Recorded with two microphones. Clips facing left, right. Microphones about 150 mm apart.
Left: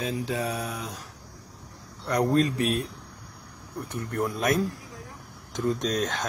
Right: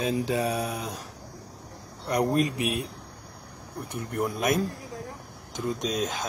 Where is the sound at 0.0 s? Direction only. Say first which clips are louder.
Right 3 dB; 20° right (ahead or behind).